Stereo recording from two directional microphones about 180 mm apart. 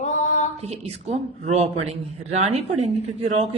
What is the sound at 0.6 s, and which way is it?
Speech, 35° right (ahead or behind).